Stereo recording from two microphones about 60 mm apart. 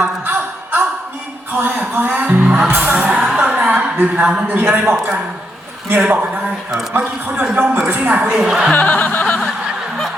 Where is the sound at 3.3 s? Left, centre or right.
Right.